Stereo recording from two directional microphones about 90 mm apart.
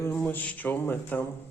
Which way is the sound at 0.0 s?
25° left (ahead or behind).